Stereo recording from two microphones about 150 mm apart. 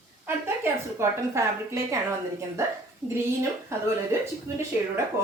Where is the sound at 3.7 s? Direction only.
20° right (ahead or behind).